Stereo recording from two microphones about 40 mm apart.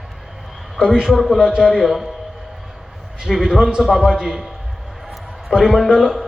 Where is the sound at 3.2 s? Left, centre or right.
Centre.